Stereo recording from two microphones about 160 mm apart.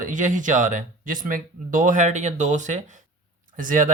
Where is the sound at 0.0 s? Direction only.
55° right (ahead or behind).